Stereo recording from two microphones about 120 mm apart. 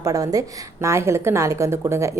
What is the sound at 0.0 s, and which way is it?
Speech, 30° right (ahead or behind).